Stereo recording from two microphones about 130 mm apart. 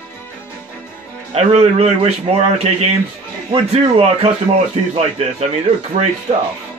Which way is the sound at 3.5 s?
45° right (ahead or behind).